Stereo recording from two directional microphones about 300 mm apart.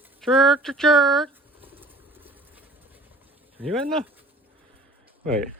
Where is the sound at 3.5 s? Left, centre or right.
Centre.